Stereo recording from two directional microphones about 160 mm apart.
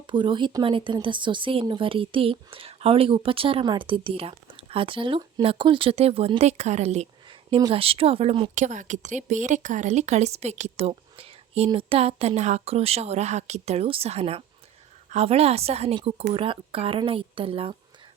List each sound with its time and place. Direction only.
0.1 s speech: 30° right (ahead or behind)